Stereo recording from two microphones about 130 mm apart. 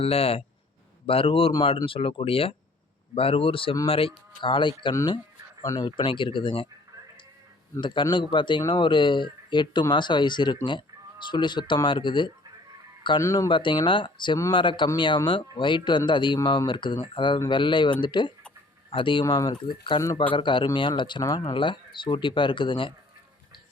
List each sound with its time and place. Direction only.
0.0 s speech: 50° left (ahead or behind)
7.8 s speech: 40° left (ahead or behind)
13.2 s speech: 25° left (ahead or behind)
13.5 s speech: 40° left (ahead or behind)